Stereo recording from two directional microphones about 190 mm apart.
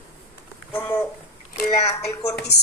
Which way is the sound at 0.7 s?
10° left (ahead or behind).